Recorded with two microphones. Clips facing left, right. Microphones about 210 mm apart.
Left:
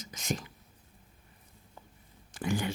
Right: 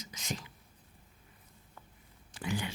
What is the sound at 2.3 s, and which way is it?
Speech, 45° left (ahead or behind).